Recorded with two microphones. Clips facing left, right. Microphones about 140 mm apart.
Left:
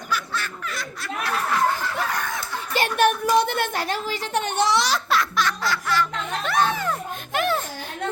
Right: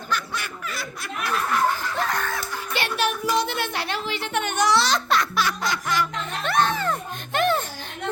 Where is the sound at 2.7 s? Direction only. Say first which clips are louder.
Left 5 dB; 45° left (ahead or behind); by 4.8 s 25° left (ahead or behind).